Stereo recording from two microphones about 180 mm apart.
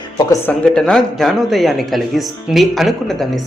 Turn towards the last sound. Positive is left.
turn(degrees=0)  # may be behind; listen again after turning